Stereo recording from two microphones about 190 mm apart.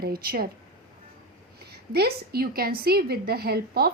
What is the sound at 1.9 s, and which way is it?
A woman's voice, 55° right (ahead or behind).